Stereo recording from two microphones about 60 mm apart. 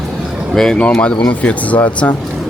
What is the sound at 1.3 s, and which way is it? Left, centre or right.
Speech, left.